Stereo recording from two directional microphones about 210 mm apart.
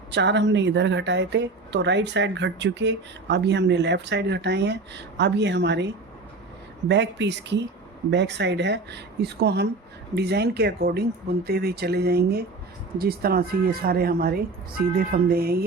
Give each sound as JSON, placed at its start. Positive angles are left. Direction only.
{"t": 0.1, "sound": "a woman's voice", "side_deg": -55}